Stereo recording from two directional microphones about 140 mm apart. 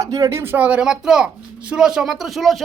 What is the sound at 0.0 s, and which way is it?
Speech, 25° right (ahead or behind).